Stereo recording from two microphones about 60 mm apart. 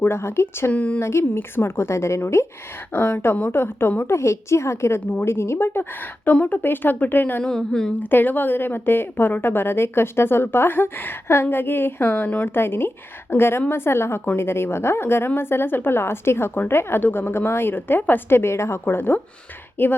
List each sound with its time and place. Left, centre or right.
0.0 s a woman's voice: left
0.7 s a woman's voice: left
0.9 s a woman's voice: left
2.9 s a woman's voice: left
6.2 s a woman's voice: left
7.4 s a woman's voice: centre
7.9 s a woman's voice: left